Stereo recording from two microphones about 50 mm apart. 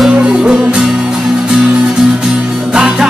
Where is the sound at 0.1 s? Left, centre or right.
Centre.